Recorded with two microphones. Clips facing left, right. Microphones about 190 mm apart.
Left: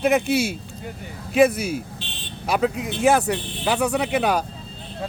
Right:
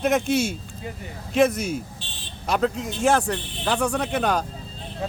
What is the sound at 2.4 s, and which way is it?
Speech, 10° left (ahead or behind).